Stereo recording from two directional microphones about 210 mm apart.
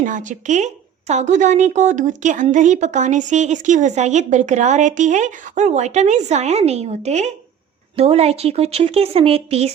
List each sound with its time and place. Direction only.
0.0 s a woman's voice: 35° right (ahead or behind)